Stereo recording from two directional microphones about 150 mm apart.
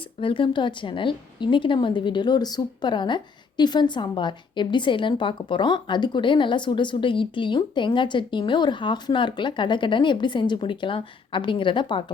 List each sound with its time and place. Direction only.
0.2 s a woman's voice: 35° left (ahead or behind)